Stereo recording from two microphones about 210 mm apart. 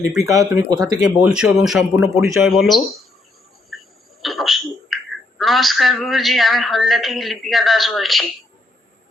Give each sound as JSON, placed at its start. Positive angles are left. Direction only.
{"t": 0.2, "sound": "speech", "side_deg": -15}
{"t": 1.0, "sound": "a woman's voice", "side_deg": -5}
{"t": 2.0, "sound": "speech", "side_deg": -15}
{"t": 2.5, "sound": "a woman's voice", "side_deg": 0}
{"t": 3.7, "sound": "a sound", "side_deg": 0}
{"t": 5.4, "sound": "a woman's voice", "side_deg": 0}